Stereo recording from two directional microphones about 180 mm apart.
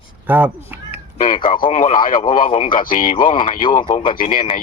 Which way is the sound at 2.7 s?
50° left (ahead or behind).